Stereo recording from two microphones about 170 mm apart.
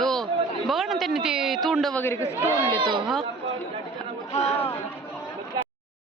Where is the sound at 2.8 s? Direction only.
30° right (ahead or behind).